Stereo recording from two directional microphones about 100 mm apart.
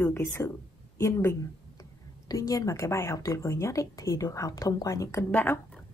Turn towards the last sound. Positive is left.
turn(degrees=15)  # may be behind; listen again after turning